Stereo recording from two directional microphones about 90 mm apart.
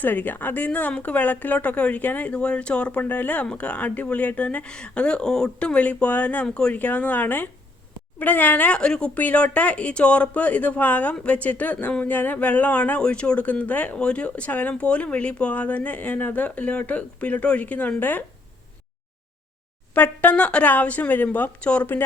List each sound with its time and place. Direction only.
0.0 s speech: 20° left (ahead or behind)
19.9 s speech: 15° left (ahead or behind)